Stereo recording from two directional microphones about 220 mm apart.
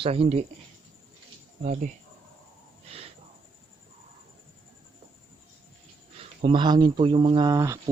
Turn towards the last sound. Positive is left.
turn(degrees=-15)  # may be behind; listen again after turning